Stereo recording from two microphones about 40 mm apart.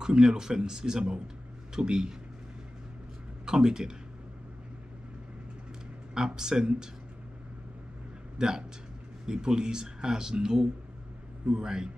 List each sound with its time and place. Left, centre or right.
0.0 s a man's voice: centre
3.4 s speech: centre
6.1 s a man's voice: centre
8.4 s a man's voice: centre